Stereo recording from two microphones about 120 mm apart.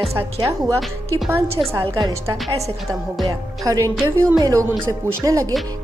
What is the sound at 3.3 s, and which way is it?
A woman's voice, 30° right (ahead or behind).